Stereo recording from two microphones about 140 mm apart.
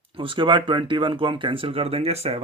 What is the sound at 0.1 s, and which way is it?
Speech, 35° right (ahead or behind).